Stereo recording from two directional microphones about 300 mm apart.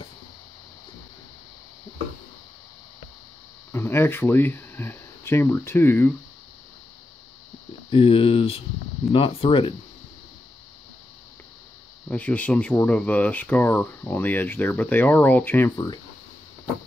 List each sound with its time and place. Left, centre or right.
3.7 s speech: centre
7.9 s speech: centre
12.1 s speech: centre